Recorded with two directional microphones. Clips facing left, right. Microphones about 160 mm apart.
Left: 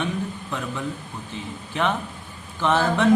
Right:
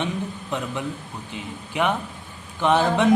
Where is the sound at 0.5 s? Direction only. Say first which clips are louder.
Right 4 dB; 20° right (ahead or behind).